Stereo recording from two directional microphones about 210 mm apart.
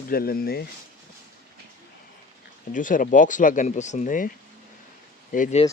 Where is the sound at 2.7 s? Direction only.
40° left (ahead or behind).